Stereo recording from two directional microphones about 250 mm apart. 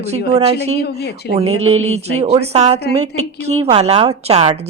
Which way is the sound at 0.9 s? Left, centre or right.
Left.